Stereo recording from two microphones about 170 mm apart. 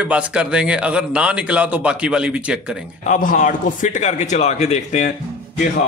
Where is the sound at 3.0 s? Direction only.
50° left (ahead or behind).